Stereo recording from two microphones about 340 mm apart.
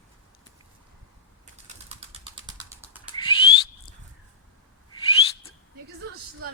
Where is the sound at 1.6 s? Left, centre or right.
Centre.